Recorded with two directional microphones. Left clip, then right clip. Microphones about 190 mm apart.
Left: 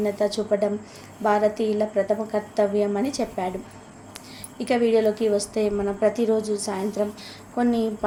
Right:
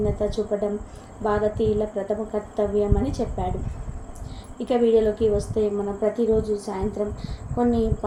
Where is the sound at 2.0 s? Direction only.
30° left (ahead or behind).